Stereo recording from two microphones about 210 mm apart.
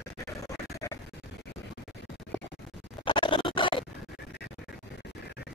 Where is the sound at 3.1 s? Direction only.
25° left (ahead or behind).